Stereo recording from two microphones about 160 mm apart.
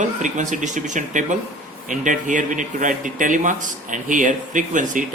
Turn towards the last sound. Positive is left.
turn(degrees=-55)  # may be behind; listen again after turning